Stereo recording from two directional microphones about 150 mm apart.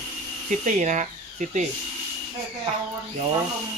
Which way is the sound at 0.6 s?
55° right (ahead or behind).